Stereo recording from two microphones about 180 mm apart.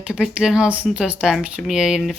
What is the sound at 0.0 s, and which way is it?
Speech, 5° right (ahead or behind).